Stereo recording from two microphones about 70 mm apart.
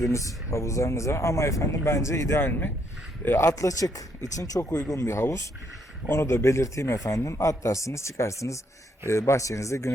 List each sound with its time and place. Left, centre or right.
0.0 s speech: left
2.4 s speech: left
4.9 s speech: left